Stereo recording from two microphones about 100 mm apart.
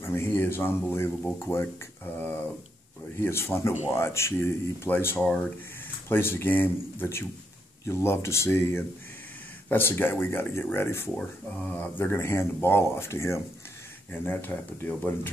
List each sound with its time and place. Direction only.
0.0 s speech: 25° left (ahead or behind)
6.0 s speech: 25° left (ahead or behind)